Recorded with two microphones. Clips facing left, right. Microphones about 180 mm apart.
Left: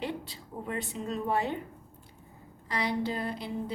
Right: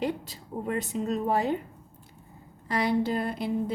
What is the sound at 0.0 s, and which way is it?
A woman's voice, 45° right (ahead or behind).